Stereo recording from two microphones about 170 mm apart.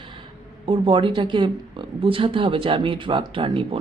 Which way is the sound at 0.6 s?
30° right (ahead or behind).